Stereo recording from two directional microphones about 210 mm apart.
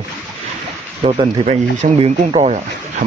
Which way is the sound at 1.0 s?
25° right (ahead or behind).